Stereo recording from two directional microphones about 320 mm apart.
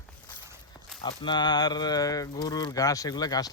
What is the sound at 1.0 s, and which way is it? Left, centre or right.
Speech, centre.